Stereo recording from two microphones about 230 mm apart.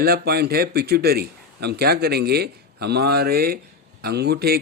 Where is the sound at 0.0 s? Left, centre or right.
Right.